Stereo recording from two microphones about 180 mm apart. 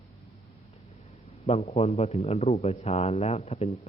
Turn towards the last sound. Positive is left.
turn(degrees=35)  # may be behind; listen again after turning